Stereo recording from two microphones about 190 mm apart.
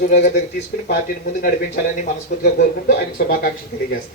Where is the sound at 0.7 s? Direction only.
50° left (ahead or behind).